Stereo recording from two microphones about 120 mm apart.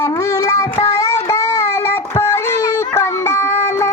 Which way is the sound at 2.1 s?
20° left (ahead or behind).